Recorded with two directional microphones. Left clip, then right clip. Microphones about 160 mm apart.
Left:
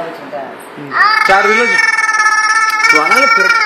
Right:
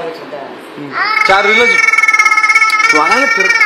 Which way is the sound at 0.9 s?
Centre (ahead or behind).